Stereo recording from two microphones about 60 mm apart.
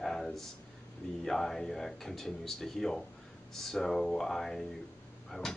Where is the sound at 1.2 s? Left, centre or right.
Centre.